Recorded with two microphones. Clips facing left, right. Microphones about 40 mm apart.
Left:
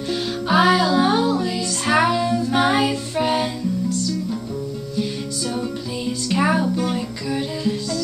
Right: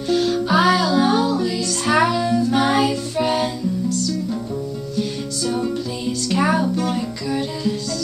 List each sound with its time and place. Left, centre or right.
0.1 s music: centre
5.5 s music: centre